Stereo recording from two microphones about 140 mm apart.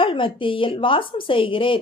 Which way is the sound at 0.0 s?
35° left (ahead or behind).